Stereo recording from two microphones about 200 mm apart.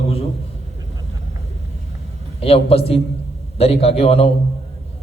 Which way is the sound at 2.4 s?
30° left (ahead or behind).